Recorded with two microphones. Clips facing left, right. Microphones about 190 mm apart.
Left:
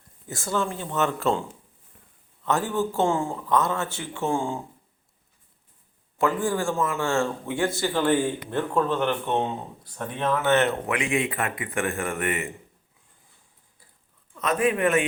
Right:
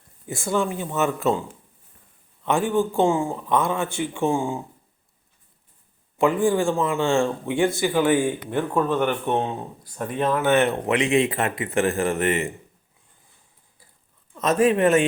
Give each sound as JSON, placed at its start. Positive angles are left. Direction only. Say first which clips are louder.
{"t": 0.3, "sound": "speech", "louder": "right 4 dB", "side_deg": -15}
{"t": 6.1, "sound": "speech", "louder": "right 5 dB", "side_deg": -15}
{"t": 10.8, "sound": "speech", "louder": "right 6 dB", "side_deg": -25}
{"t": 14.3, "sound": "a man's voice", "louder": "right 5 dB", "side_deg": -40}